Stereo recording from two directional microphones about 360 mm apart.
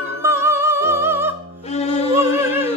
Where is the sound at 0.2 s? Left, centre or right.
Centre.